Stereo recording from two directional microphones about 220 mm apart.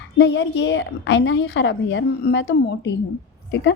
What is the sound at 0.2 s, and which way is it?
A woman's voice, 50° left (ahead or behind).